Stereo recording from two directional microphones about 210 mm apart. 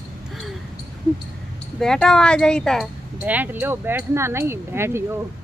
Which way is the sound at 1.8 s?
5° left (ahead or behind).